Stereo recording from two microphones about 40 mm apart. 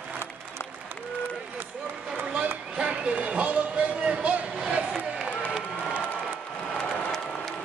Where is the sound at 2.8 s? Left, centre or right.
Right.